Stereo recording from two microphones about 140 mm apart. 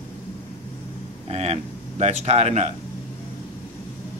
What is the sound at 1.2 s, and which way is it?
Speech, 50° right (ahead or behind).